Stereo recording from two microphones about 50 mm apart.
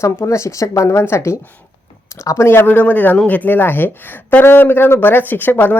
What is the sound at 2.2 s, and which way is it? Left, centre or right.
Speech, left.